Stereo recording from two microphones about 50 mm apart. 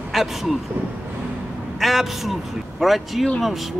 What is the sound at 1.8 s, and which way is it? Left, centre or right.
Speech, centre.